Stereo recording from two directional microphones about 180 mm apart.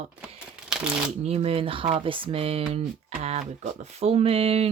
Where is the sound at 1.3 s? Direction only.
35° right (ahead or behind).